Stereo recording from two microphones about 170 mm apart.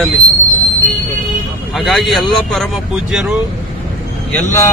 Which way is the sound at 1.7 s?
Centre (ahead or behind).